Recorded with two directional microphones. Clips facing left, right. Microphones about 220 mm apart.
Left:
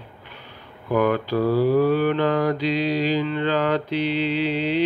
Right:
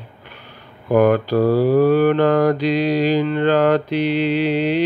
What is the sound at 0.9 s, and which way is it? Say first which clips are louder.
Mantra: right 6 dB; 50° right (ahead or behind).